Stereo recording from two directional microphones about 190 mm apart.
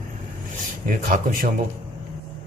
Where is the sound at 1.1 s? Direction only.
40° right (ahead or behind).